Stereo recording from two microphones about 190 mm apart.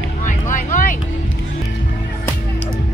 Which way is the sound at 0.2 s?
40° left (ahead or behind).